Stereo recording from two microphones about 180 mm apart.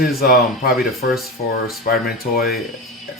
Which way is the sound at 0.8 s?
Centre (ahead or behind).